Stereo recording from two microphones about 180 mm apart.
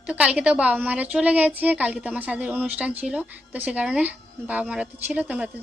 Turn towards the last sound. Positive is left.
turn(degrees=-10)  # may be behind; listen again after turning